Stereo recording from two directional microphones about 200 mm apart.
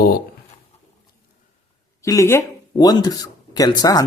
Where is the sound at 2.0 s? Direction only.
15° left (ahead or behind).